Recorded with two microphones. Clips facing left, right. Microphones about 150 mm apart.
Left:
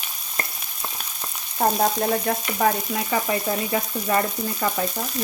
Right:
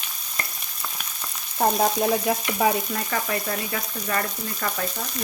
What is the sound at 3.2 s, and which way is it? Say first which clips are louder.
Frying: left 4 dB; 20° left (ahead or behind).